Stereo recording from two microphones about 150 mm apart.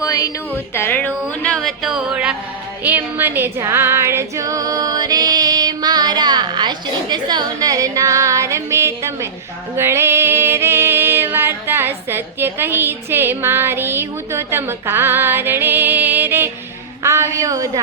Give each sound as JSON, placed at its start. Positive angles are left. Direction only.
{"t": 0.0, "sound": "music", "side_deg": 20}
{"t": 2.8, "sound": "female singing", "side_deg": -10}
{"t": 9.7, "sound": "music", "side_deg": -15}
{"t": 17.0, "sound": "a sound", "side_deg": -20}